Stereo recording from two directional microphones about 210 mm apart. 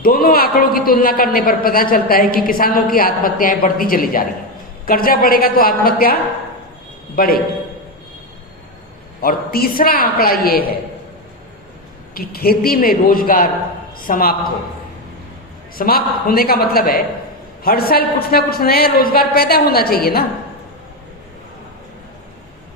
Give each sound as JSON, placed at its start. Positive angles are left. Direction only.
{"t": 0.0, "sound": "a man's voice", "side_deg": 45}
{"t": 7.2, "sound": "a man's voice", "side_deg": 45}
{"t": 9.2, "sound": "a man's voice", "side_deg": 45}
{"t": 12.1, "sound": "a man's voice", "side_deg": 45}
{"t": 15.7, "sound": "a man's voice", "side_deg": 45}